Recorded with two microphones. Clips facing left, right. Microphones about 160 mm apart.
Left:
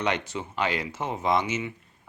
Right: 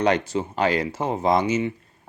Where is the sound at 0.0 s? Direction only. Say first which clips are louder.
Right 7 dB; 35° right (ahead or behind).